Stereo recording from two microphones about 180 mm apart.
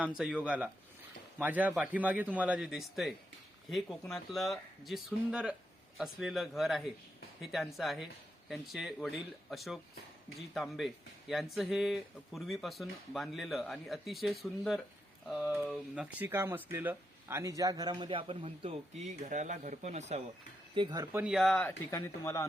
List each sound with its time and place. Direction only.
0.0 s a man's voice: 5° right (ahead or behind); by 20.2 s 40° right (ahead or behind)
20.7 s speech: 25° right (ahead or behind)
21.2 s speech: 5° right (ahead or behind)
21.5 s speech: 10° left (ahead or behind)